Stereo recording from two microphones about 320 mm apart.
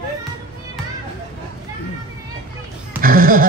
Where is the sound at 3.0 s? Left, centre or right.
Right.